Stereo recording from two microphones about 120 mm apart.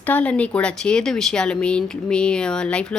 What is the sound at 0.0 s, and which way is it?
Speech, 10° left (ahead or behind).